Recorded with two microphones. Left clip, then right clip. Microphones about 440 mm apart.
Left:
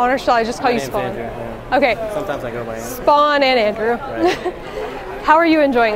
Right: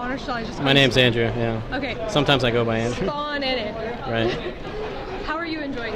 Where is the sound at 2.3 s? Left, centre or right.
Right.